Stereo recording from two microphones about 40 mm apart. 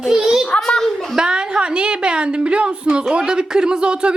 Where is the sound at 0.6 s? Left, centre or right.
Centre.